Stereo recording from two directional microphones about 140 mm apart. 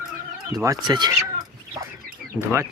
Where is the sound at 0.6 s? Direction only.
30° right (ahead or behind).